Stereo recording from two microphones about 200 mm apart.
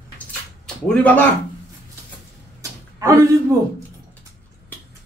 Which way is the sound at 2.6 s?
15° right (ahead or behind).